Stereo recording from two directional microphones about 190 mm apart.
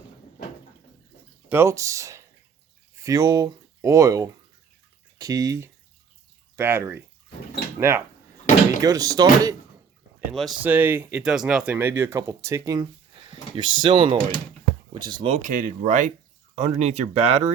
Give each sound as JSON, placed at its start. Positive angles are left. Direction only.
{"t": 1.5, "sound": "speech", "side_deg": -15}
{"t": 10.3, "sound": "speech", "side_deg": 0}
{"t": 10.7, "sound": "speech", "side_deg": -10}
{"t": 15.4, "sound": "speech", "side_deg": -45}